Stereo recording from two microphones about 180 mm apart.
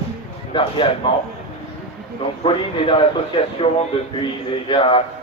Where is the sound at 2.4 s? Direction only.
30° left (ahead or behind).